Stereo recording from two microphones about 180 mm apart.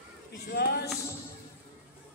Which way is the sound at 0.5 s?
65° left (ahead or behind).